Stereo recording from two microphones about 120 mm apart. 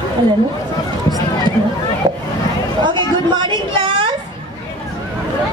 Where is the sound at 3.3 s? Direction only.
45° right (ahead or behind).